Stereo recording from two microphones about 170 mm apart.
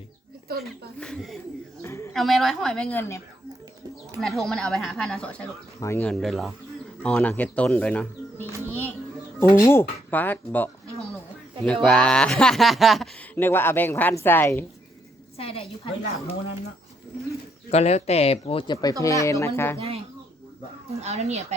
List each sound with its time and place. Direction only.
0.6 s speech: 5° left (ahead or behind)
1.8 s a sound: 15° left (ahead or behind)
2.1 s speech: centre (ahead or behind)
4.2 s speech: centre (ahead or behind)
6.1 s speech: centre (ahead or behind)
8.6 s music: 10° left (ahead or behind)
9.4 s speech: 15° left (ahead or behind)
13.3 s speech: 10° left (ahead or behind)
15.4 s speech: 30° left (ahead or behind)
17.7 s speech: 40° left (ahead or behind); by 19.8 s 15° left (ahead or behind)
21.0 s speech: 40° right (ahead or behind)